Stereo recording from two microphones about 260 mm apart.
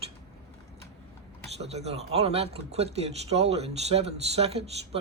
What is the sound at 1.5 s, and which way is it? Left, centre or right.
Speech, right.